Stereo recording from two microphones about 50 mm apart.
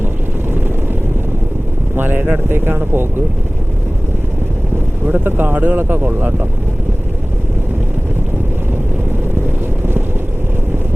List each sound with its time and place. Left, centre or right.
2.0 s speech: right
5.0 s speech: right